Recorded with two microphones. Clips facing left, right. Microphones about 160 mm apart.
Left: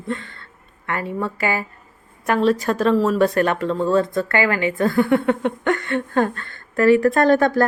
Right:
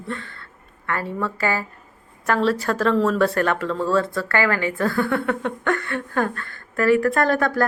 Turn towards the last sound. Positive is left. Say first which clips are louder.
# left 4 dB
turn(degrees=25)  # may be behind; listen again after turning